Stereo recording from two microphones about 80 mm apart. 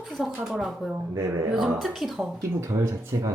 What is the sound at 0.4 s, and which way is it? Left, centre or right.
Speech, centre.